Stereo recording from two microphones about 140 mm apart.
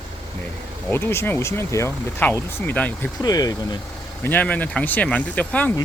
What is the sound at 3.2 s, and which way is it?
Speech, 25° left (ahead or behind).